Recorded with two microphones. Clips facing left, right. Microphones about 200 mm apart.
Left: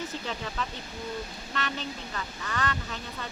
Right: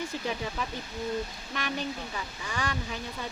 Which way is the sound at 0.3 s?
10° right (ahead or behind).